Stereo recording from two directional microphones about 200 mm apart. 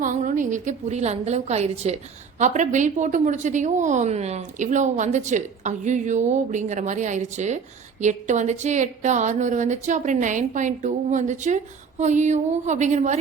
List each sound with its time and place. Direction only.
0.0 s a woman's voice: 40° right (ahead or behind)